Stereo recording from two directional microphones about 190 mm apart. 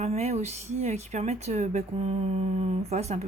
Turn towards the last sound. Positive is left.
turn(degrees=-35)  # may be behind; listen again after turning